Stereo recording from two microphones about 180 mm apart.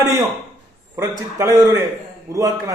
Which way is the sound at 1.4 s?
15° right (ahead or behind).